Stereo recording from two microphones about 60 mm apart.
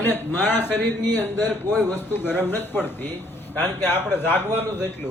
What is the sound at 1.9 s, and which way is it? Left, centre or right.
A man's voice, left.